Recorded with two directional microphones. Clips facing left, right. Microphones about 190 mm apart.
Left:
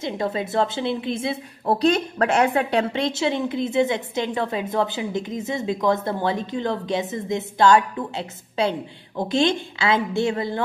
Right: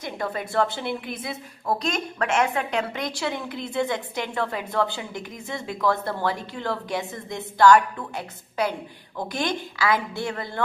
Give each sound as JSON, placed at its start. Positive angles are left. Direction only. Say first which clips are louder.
{"t": 0.0, "sound": "a woman's voice", "louder": "left 5 dB", "side_deg": 25}